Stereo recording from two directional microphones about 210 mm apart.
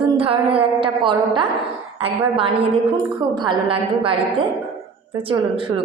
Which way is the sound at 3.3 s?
20° right (ahead or behind).